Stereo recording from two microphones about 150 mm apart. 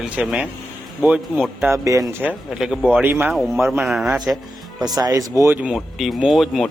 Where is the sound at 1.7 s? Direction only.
20° right (ahead or behind).